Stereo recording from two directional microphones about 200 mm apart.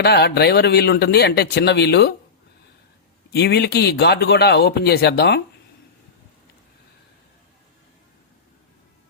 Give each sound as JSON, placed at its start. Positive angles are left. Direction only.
{"t": 0.0, "sound": "speech", "side_deg": 55}
{"t": 3.3, "sound": "speech", "side_deg": 55}